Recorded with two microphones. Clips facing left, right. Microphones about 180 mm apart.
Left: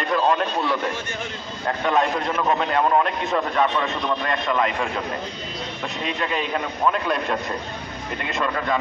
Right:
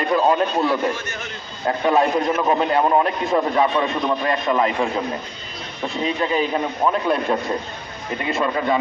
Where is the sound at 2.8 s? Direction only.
20° right (ahead or behind).